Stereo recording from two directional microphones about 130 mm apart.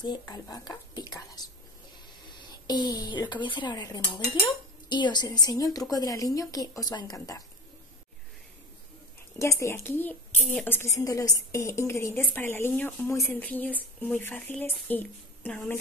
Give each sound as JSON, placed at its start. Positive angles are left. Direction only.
{"t": 0.3, "sound": "speech", "side_deg": 30}
{"t": 2.6, "sound": "a woman's voice", "side_deg": 30}
{"t": 9.4, "sound": "a woman's voice", "side_deg": 20}